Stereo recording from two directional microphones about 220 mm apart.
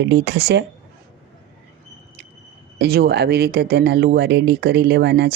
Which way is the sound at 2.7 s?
45° right (ahead or behind).